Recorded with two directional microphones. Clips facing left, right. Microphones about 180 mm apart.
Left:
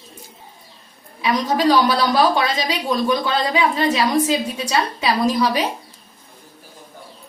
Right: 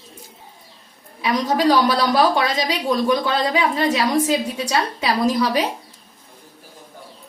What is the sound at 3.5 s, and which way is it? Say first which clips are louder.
Speech: left 1 dB; 45° right (ahead or behind).